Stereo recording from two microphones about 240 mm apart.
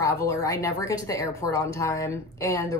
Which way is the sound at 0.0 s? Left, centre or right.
Centre.